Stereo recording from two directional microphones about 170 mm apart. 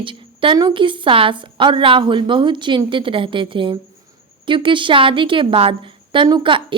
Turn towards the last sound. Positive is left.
turn(degrees=-30)  # may be behind; listen again after turning